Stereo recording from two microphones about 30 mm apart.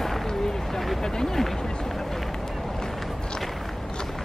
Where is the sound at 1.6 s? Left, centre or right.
Left.